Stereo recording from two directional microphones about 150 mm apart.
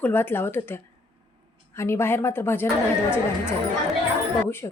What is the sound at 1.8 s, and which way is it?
Speech, 15° left (ahead or behind).